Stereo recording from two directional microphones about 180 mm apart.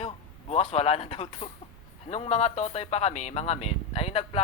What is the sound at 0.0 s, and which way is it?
Speech, 35° left (ahead or behind).